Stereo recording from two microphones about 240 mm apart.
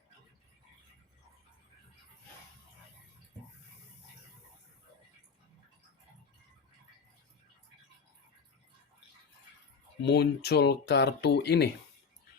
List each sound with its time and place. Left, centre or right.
10.0 s speech: left